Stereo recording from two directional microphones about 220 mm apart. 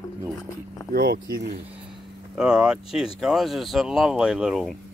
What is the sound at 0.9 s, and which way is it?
Speech, 45° right (ahead or behind).